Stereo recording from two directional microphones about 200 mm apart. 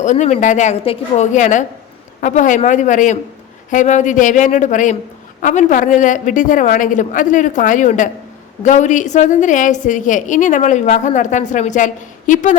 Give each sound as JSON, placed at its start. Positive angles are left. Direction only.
{"t": 0.0, "sound": "a woman's voice", "side_deg": 35}